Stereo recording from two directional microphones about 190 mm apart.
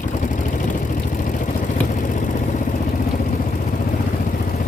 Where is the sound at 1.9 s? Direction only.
40° left (ahead or behind).